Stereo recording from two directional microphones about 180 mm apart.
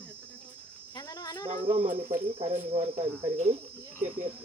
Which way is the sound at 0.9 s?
20° left (ahead or behind).